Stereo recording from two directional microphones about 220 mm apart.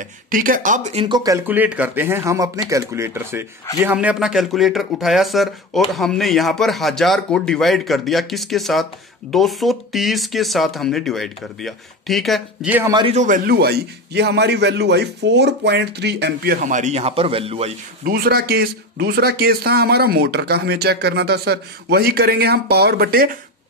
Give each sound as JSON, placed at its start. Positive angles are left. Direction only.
{"t": 0.3, "sound": "speech", "side_deg": -40}
{"t": 12.8, "sound": "a man's voice", "side_deg": -20}
{"t": 13.1, "sound": "speech", "side_deg": -35}
{"t": 18.0, "sound": "speech", "side_deg": -45}